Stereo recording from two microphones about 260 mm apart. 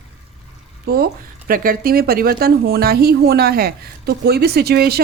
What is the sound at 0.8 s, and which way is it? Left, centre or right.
Speech, right.